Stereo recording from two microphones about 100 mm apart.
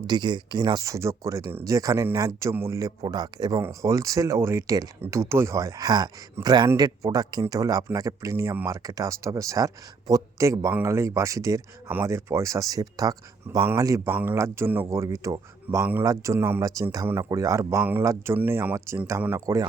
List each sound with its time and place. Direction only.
0.1 s speech: 45° right (ahead or behind)
3.6 s speech: 30° right (ahead or behind)
14.1 s speech: 20° right (ahead or behind)
15.8 s speech: 20° right (ahead or behind)
16.0 s speech: 30° right (ahead or behind)
18.3 s speech: 20° right (ahead or behind)